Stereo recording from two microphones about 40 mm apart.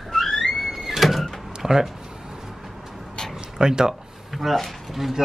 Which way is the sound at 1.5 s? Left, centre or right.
Centre.